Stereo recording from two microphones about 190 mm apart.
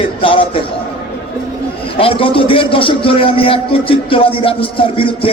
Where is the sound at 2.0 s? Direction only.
30° left (ahead or behind).